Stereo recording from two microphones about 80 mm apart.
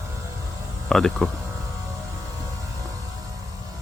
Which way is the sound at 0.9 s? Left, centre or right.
Centre.